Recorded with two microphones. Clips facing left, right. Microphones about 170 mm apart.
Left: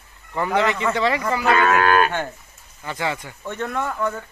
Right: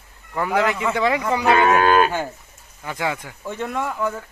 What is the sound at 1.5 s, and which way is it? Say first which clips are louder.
A man's voice: right 2 dB; 25° right (ahead or behind).